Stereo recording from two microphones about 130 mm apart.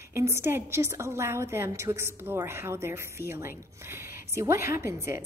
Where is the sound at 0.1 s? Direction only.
20° right (ahead or behind).